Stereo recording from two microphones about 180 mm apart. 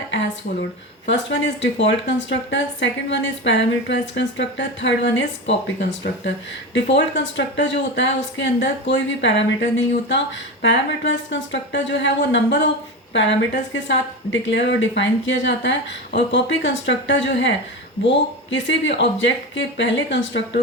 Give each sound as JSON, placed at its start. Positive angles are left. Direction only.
{"t": 1.0, "sound": "speech", "side_deg": 90}
{"t": 6.7, "sound": "speech", "side_deg": 85}